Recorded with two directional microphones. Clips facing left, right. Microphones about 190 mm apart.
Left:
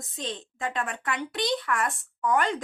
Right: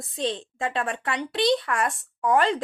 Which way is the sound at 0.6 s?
30° right (ahead or behind).